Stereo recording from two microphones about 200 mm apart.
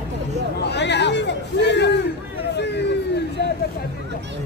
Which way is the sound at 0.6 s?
60° left (ahead or behind).